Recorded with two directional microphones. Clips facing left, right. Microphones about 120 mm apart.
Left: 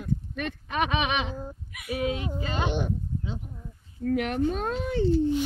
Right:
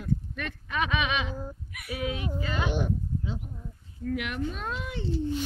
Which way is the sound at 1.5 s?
5° left (ahead or behind).